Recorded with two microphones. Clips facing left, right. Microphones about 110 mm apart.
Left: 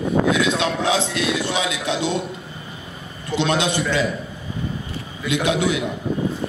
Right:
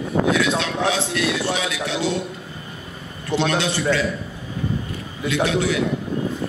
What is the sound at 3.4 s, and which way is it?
Speech, 15° left (ahead or behind).